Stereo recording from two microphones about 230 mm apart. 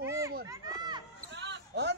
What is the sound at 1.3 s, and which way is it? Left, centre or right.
Basketball bounce, right.